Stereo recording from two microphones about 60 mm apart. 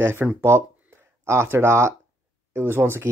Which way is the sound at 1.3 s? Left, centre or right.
Right.